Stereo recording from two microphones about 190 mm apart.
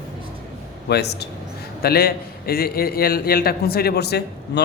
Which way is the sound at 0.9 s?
60° left (ahead or behind).